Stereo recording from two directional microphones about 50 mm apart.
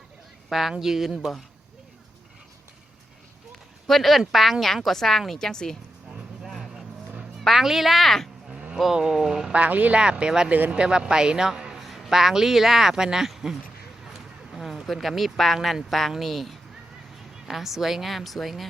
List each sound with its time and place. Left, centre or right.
0.8 s a man's voice: centre
3.8 s a woman's voice: centre
6.1 s clip-clop: centre
6.5 s vehicle: centre
7.4 s speech: centre
8.7 s a man's voice: centre
9.5 s speech: right
10.0 s a man's voice: centre
11.8 s speech: centre